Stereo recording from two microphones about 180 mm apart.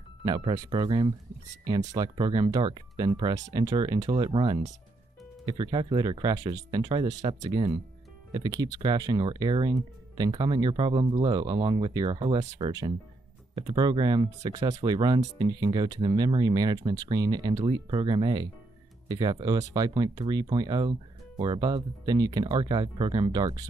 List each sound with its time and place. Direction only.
0.2 s speech: 25° right (ahead or behind)